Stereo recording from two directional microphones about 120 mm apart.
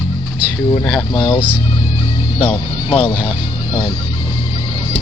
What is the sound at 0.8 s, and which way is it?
Speech, 5° left (ahead or behind).